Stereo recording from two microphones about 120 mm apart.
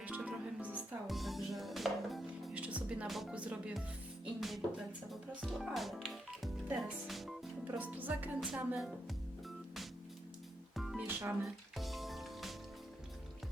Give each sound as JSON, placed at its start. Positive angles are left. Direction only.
{"t": 0.0, "sound": "music", "side_deg": -10}
{"t": 1.0, "sound": "music", "side_deg": 0}
{"t": 2.6, "sound": "music", "side_deg": -10}
{"t": 3.1, "sound": "speech", "side_deg": 0}
{"t": 4.4, "sound": "music", "side_deg": 0}
{"t": 5.4, "sound": "speech", "side_deg": 0}
{"t": 7.7, "sound": "speech", "side_deg": -15}
{"t": 10.8, "sound": "music", "side_deg": 0}
{"t": 11.0, "sound": "music", "side_deg": -20}
{"t": 11.4, "sound": "music", "side_deg": 0}